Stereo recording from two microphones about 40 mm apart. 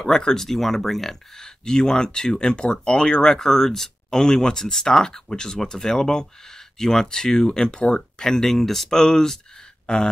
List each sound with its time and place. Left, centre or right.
0.0 s speech: centre